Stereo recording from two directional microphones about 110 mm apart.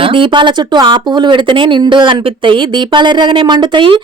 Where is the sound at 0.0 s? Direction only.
50° right (ahead or behind).